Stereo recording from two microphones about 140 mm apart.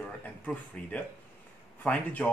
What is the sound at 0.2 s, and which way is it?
Speech, 10° left (ahead or behind).